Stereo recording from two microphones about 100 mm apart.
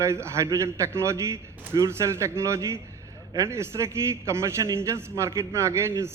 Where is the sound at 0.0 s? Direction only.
30° right (ahead or behind).